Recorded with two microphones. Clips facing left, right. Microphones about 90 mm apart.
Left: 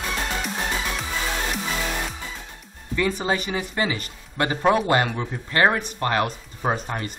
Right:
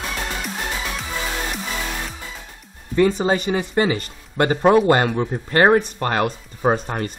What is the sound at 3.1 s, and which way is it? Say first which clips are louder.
Speech: right 5 dB; 30° right (ahead or behind).